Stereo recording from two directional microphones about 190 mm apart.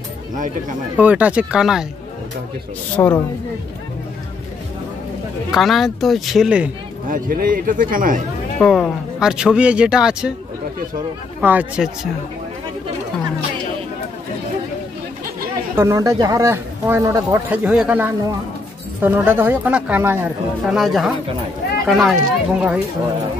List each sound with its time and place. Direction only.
0.9 s speech: 5° right (ahead or behind)
3.0 s a woman's voice: 15° left (ahead or behind)
5.5 s speech: centre (ahead or behind)
7.1 s a man's voice: 45° right (ahead or behind)
8.5 s speech: 5° left (ahead or behind)
11.4 s speech: 10° right (ahead or behind)
15.7 s speech: 15° right (ahead or behind)